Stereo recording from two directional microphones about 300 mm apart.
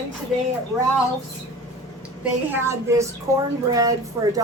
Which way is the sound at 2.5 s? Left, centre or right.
Centre.